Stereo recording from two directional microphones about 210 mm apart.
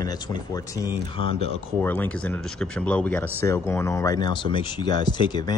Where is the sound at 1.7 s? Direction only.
10° left (ahead or behind).